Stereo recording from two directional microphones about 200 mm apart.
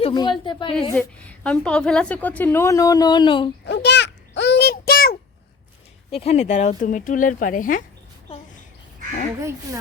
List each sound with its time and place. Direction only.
0.0 s a woman's voice: 20° left (ahead or behind)
0.9 s a woman's voice: 5° left (ahead or behind); by 3.5 s 25° left (ahead or behind)
3.7 s a sound: 55° left (ahead or behind)
6.1 s speech: 30° left (ahead or behind)